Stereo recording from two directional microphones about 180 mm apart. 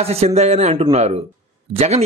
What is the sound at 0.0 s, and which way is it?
A man's voice, 35° right (ahead or behind).